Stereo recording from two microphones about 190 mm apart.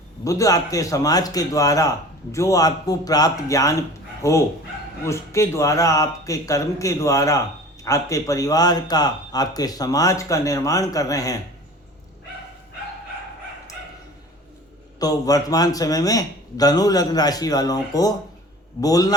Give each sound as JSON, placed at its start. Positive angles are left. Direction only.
{"t": 0.3, "sound": "a man's voice", "side_deg": 15}
{"t": 14.9, "sound": "a man's voice", "side_deg": 20}